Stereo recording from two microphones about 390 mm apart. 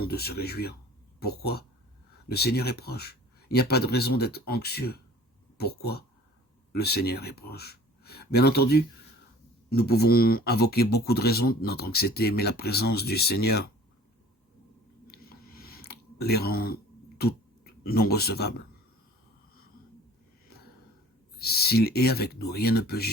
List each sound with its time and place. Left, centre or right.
0.0 s speech: left
2.3 s speech: left
15.0 s a sound: left
17.8 s speech: left
21.3 s speech: left